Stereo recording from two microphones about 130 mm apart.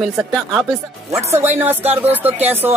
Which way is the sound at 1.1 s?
20° right (ahead or behind).